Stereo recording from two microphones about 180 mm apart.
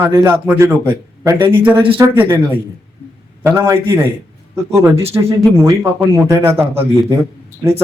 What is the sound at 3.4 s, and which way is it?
Speech, 15° right (ahead or behind).